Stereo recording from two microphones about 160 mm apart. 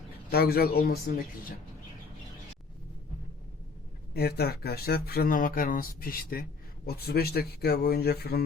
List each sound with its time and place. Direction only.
0.3 s speech: 75° left (ahead or behind)
4.1 s speech: 80° left